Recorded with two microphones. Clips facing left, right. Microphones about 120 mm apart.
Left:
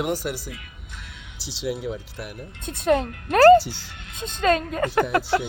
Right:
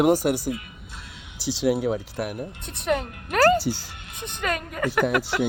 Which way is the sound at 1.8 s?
45° right (ahead or behind).